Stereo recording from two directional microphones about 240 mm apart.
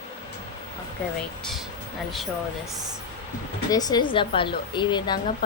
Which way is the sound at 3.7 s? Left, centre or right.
Centre.